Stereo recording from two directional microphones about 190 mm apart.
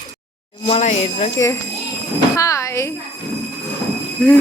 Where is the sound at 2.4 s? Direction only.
15° left (ahead or behind).